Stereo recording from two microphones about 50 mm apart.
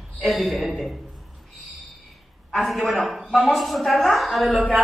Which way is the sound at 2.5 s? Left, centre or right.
Centre.